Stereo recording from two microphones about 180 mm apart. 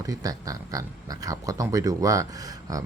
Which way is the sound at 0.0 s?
20° right (ahead or behind).